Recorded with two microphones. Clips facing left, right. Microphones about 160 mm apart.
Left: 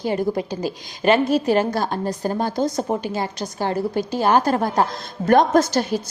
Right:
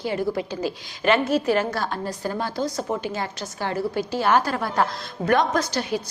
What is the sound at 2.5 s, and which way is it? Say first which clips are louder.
Speech: left 4 dB; 20° left (ahead or behind).